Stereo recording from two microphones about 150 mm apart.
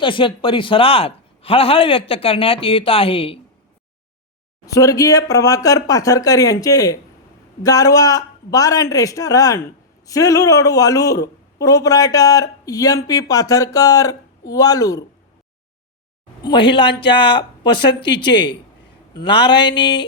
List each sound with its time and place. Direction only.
0.0 s a man's voice: 35° left (ahead or behind)
4.6 s a man's voice: 20° left (ahead or behind)
16.4 s a man's voice: 30° left (ahead or behind)